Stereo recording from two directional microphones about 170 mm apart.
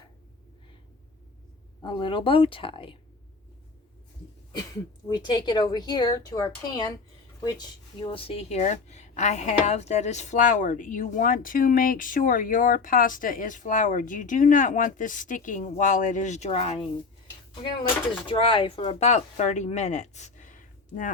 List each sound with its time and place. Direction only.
1.8 s a woman's voice: 30° left (ahead or behind)
4.5 s a woman's voice: 25° left (ahead or behind); by 16.7 s 40° left (ahead or behind)
18.1 s speech: 30° left (ahead or behind); by 21.1 s 50° left (ahead or behind)